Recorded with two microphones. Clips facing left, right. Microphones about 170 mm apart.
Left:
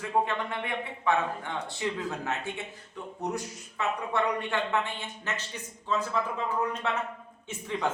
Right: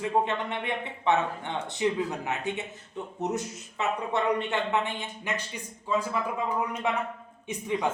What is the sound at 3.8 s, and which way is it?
Speech, 20° right (ahead or behind).